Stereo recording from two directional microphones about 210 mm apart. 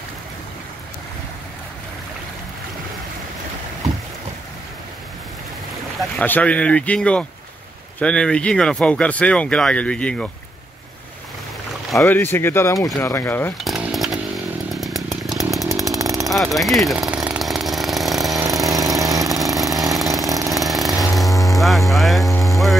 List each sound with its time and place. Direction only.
5.9 s speech: 10° left (ahead or behind)
12.0 s speech: 10° left (ahead or behind)
13.7 s chainsaw: centre (ahead or behind)
16.0 s vehicle: 15° right (ahead or behind)
16.5 s chainsaw: centre (ahead or behind)
18.5 s engine: centre (ahead or behind)
19.2 s a sound: centre (ahead or behind)
20.5 s vehicle: centre (ahead or behind)
22.4 s a sound: centre (ahead or behind)